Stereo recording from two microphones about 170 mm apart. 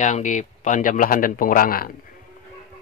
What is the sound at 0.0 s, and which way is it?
Speech, 45° left (ahead or behind).